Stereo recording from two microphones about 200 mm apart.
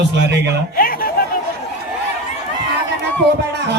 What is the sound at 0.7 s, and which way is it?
Speech, 45° left (ahead or behind).